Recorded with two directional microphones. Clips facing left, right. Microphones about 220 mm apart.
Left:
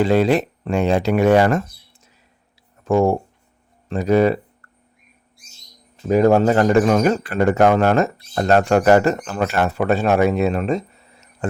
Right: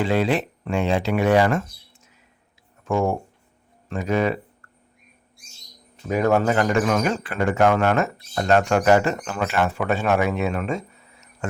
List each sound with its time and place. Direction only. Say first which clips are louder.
0.0 s speech: left 5 dB; 40° left (ahead or behind)
2.8 s speech: left 6 dB; 35° left (ahead or behind)
6.1 s speech: left 5 dB; 35° left (ahead or behind)